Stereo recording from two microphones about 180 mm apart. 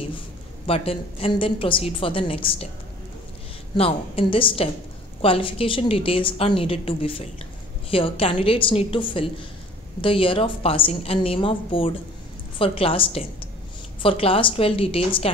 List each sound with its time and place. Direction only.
0.7 s a woman's voice: 30° left (ahead or behind)
3.7 s a woman's voice: 30° left (ahead or behind)